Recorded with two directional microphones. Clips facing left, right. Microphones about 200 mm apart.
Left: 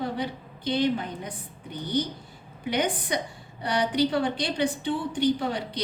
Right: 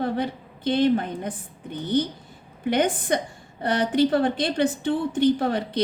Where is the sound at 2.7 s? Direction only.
50° right (ahead or behind).